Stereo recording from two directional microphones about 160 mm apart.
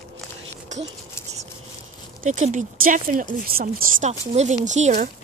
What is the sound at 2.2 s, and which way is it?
Speech, 50° right (ahead or behind).